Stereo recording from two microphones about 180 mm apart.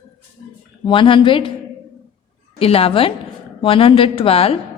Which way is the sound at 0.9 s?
25° left (ahead or behind).